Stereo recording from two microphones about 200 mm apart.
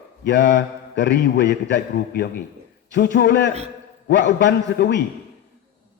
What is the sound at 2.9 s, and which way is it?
A man's voice, 60° left (ahead or behind).